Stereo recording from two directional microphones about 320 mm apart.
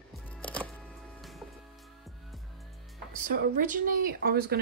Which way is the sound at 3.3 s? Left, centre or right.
Right.